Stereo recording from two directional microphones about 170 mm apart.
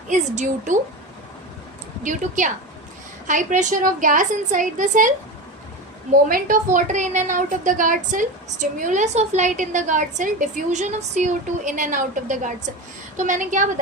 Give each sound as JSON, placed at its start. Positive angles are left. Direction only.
{"t": 0.1, "sound": "a woman's voice", "side_deg": -45}
{"t": 2.0, "sound": "a woman's voice", "side_deg": -45}
{"t": 6.2, "sound": "a woman's voice", "side_deg": -55}